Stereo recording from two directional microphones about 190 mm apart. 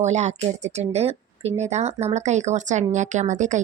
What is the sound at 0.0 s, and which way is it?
Speech, 35° right (ahead or behind).